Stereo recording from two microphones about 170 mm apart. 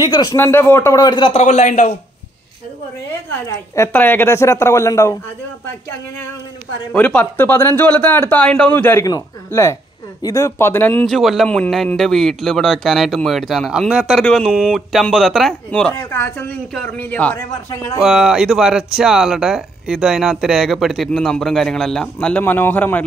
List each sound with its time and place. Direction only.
0.0 s speech: 25° left (ahead or behind)
0.4 s speech: 15° left (ahead or behind)
1.4 s a man's voice: 40° left (ahead or behind)
3.4 s speech: 15° left (ahead or behind)
6.9 s speech: 5° left (ahead or behind)
11.1 s speech: centre (ahead or behind)
15.9 s speech: 15° left (ahead or behind)
18.0 s speech: 5° right (ahead or behind)